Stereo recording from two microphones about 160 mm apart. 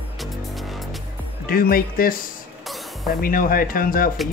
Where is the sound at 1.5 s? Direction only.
65° left (ahead or behind).